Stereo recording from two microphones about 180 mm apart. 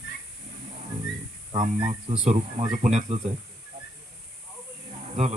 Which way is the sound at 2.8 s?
40° right (ahead or behind).